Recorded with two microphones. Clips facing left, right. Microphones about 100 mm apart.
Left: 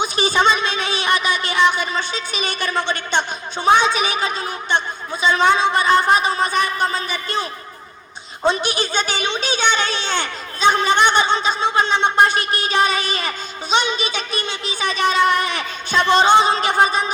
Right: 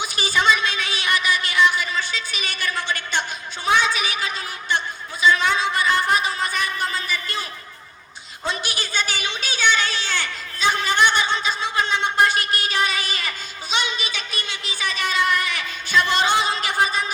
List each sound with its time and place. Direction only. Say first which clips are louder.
0.0 s a child's voice: left 4 dB; 25° left (ahead or behind)
8.4 s a child's voice: left 9 dB; 25° left (ahead or behind)